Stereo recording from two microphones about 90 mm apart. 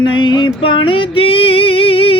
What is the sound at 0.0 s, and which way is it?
Music, 65° left (ahead or behind).